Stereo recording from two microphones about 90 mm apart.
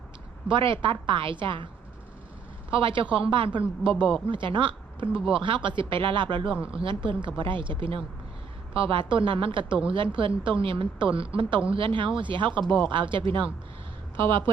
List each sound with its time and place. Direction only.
0.4 s a woman's voice: 75° right (ahead or behind)